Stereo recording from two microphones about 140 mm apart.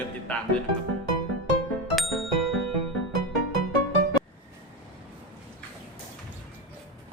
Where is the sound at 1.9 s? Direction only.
Centre (ahead or behind).